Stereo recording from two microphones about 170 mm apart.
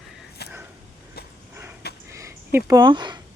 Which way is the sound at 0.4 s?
70° left (ahead or behind).